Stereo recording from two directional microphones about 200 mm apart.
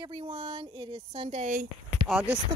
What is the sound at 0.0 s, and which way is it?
Speech, 25° right (ahead or behind).